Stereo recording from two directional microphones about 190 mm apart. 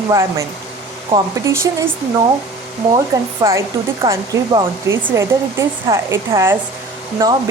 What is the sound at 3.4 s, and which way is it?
Speech, 20° right (ahead or behind).